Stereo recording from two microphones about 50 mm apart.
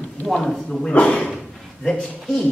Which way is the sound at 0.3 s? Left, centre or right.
Centre.